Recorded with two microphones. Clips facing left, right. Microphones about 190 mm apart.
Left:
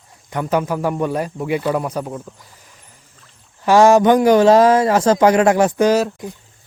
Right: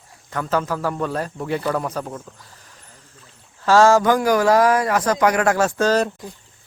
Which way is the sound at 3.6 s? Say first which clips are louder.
Left 3 dB; 15° left (ahead or behind).